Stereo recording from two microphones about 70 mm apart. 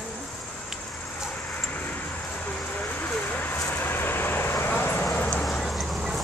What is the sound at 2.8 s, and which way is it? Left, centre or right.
Vehicle, left.